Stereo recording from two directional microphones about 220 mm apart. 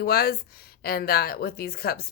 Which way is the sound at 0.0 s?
45° left (ahead or behind).